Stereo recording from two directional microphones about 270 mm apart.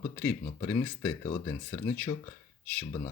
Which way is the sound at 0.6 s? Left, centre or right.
Centre.